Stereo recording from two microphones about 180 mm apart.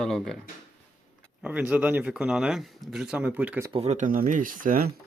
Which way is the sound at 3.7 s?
35° right (ahead or behind).